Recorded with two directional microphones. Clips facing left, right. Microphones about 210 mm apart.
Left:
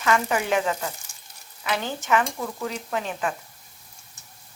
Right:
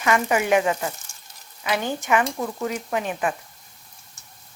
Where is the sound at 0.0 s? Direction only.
15° right (ahead or behind).